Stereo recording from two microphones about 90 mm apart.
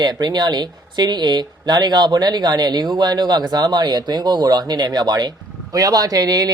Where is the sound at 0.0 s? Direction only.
50° right (ahead or behind).